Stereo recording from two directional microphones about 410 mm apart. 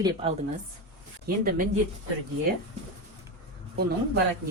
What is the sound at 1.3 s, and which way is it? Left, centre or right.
Speech, right.